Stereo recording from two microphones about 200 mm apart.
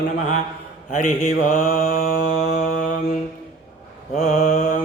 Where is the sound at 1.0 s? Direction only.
40° left (ahead or behind).